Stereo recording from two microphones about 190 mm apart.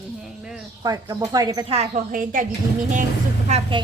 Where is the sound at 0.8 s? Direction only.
20° right (ahead or behind).